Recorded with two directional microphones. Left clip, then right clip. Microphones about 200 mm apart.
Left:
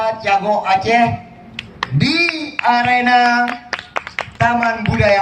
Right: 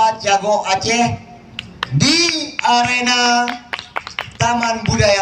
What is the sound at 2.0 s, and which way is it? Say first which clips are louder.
Speech: right 2 dB; 60° right (ahead or behind).